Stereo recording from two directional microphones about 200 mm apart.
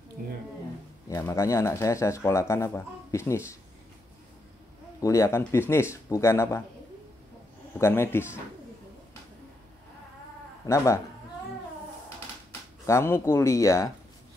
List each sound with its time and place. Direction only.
1.0 s speech: 15° left (ahead or behind)
5.0 s speech: 15° left (ahead or behind)
7.8 s speech: 10° left (ahead or behind)
10.6 s speech: 15° left (ahead or behind)
12.8 s speech: 15° left (ahead or behind)